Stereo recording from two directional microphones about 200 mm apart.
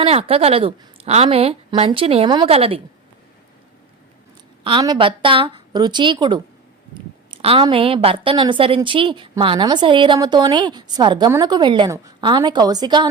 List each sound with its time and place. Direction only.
0.0 s a woman's voice: 30° right (ahead or behind)
4.6 s a woman's voice: 20° right (ahead or behind)